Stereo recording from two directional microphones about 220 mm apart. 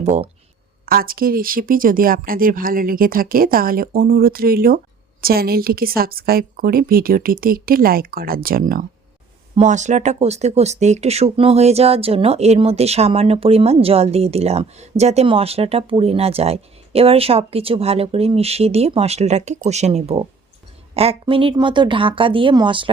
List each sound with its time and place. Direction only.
0.9 s speech: 40° right (ahead or behind); by 22.9 s 20° right (ahead or behind)